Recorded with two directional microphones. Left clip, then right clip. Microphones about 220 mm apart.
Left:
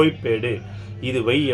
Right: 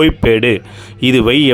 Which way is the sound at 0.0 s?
40° right (ahead or behind).